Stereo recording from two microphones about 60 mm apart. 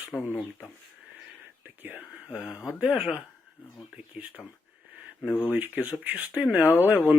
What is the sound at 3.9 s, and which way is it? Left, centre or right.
Speech, right.